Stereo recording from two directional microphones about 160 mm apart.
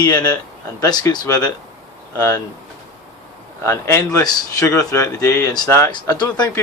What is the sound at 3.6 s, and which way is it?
Speech, 15° left (ahead or behind).